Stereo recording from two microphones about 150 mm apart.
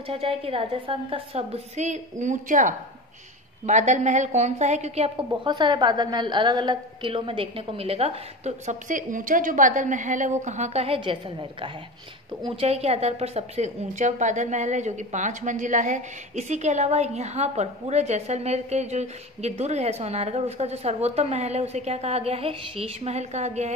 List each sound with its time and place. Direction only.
0.0 s a woman's voice: 40° right (ahead or behind)
5.3 s a woman's voice: 30° right (ahead or behind); by 23.7 s 50° right (ahead or behind)